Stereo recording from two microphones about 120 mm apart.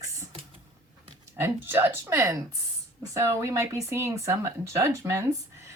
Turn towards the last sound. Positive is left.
turn(degrees=-25)  # may be behind; listen again after turning